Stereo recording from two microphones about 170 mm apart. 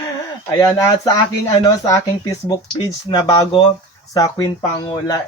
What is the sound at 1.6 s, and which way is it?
Speech, 20° left (ahead or behind).